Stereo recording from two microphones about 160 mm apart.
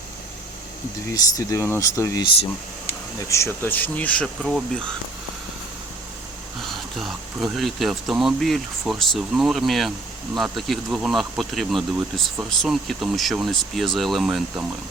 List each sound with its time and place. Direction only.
1.1 s speech: 20° left (ahead or behind)
3.2 s speech: 15° left (ahead or behind); by 4.8 s centre (ahead or behind)
6.6 s speech: centre (ahead or behind)